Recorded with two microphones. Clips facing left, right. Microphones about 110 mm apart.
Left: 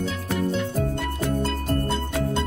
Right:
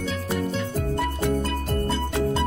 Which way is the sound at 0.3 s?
Centre (ahead or behind).